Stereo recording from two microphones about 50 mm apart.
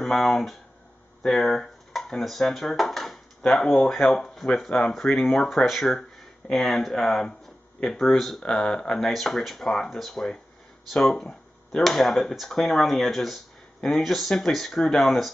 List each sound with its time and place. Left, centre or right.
0.0 s speech: centre
4.6 s speech: left
9.0 s speech: centre